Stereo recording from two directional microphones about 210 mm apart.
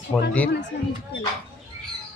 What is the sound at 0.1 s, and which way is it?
Speech, 15° left (ahead or behind).